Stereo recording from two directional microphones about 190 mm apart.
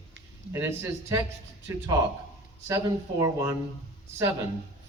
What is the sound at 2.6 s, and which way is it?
Speech, 15° right (ahead or behind).